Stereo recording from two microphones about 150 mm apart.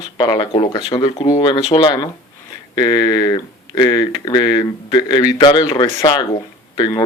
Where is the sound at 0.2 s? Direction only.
30° left (ahead or behind).